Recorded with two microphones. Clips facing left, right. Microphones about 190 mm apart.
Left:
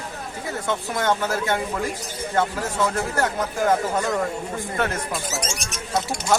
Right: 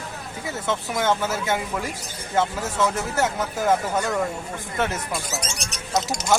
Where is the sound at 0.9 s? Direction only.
5° right (ahead or behind).